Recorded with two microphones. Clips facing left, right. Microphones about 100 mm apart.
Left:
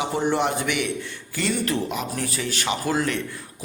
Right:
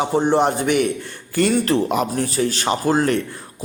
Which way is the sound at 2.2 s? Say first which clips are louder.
Right 7 dB; 35° right (ahead or behind).